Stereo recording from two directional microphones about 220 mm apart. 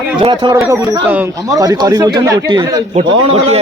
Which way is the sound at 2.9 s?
30° right (ahead or behind).